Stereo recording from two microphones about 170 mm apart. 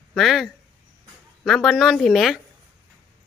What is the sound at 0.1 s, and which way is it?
A woman's voice, centre (ahead or behind).